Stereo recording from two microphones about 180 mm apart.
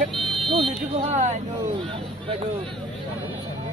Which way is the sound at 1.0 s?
35° right (ahead or behind).